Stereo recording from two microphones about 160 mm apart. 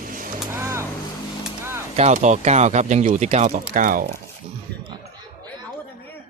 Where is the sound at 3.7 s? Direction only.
55° right (ahead or behind).